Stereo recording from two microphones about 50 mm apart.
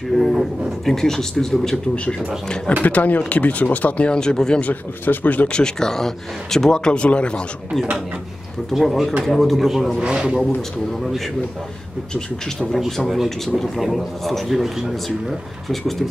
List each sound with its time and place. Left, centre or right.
0.1 s speech: centre
2.8 s speech: left; by 4.6 s centre
5.0 s speech: left
5.5 s speech: centre
8.7 s speech: centre
9.7 s a man's voice: centre
10.0 s a man's voice: centre
11.0 s speech: centre
12.5 s speech: centre